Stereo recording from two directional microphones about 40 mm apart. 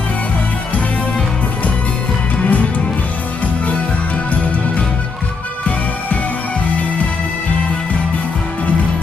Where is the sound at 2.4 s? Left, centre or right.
Left.